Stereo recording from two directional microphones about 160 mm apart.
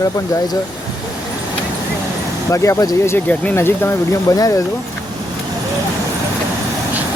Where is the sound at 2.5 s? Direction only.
20° left (ahead or behind).